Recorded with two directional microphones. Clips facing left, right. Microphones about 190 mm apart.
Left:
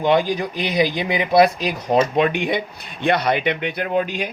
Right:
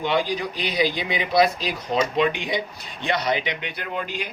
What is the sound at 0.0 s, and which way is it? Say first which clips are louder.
A man's voice: left 5 dB; 50° left (ahead or behind).